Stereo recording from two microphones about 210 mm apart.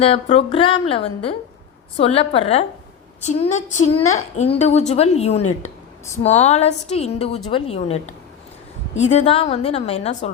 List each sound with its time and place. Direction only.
0.0 s a woman's voice: 25° left (ahead or behind)